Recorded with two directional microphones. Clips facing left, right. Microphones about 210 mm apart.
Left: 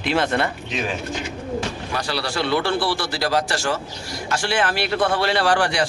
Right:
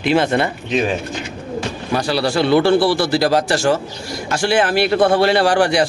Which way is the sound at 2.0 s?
15° right (ahead or behind).